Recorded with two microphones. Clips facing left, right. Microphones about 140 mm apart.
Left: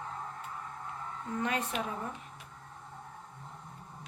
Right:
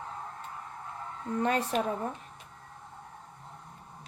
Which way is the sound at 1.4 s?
35° right (ahead or behind).